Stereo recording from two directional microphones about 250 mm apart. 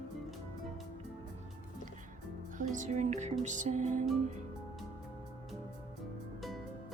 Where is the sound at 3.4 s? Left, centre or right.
Right.